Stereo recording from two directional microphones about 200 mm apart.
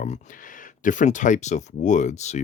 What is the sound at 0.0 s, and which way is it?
Speech, 40° left (ahead or behind).